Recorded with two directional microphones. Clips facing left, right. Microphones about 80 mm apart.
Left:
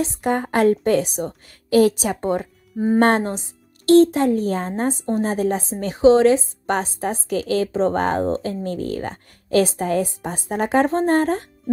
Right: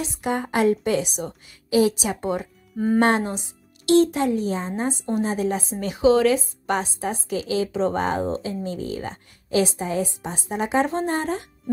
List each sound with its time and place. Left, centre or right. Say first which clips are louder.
0.0 s a woman's voice: left 4 dB; left